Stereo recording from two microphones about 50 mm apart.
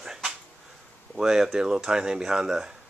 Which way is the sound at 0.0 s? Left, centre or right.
Centre.